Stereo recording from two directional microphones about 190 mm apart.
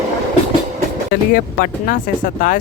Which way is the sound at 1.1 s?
50° left (ahead or behind).